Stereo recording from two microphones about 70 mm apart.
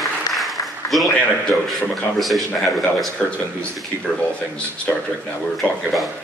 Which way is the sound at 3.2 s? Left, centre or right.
Centre.